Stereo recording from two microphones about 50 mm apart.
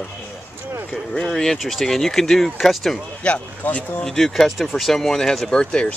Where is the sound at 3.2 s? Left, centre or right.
Left.